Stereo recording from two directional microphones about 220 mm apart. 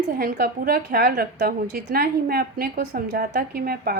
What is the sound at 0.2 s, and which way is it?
A woman's voice, 45° right (ahead or behind).